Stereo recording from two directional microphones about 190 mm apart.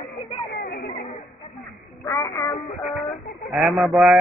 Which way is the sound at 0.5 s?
55° left (ahead or behind).